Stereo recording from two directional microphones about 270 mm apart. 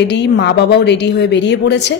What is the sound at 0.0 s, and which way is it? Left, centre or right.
A woman's voice, left.